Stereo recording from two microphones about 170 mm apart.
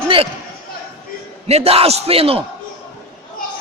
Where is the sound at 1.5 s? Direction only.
35° right (ahead or behind).